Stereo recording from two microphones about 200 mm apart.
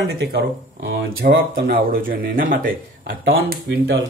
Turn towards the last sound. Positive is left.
turn(degrees=-65)  # may be behind; listen again after turning